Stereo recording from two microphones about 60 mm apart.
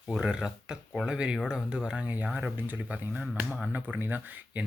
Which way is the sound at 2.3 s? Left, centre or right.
Right.